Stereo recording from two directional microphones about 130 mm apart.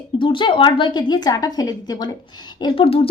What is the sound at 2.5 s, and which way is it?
Speech, 40° left (ahead or behind).